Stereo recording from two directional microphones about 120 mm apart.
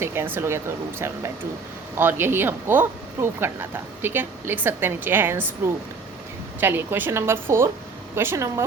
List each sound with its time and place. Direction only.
0.0 s speech: 20° right (ahead or behind)
6.6 s speech: 15° right (ahead or behind)